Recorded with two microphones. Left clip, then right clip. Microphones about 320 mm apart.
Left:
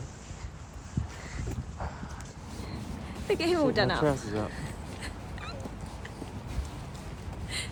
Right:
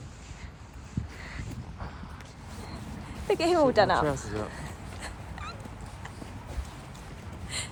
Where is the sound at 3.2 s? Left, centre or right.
Centre.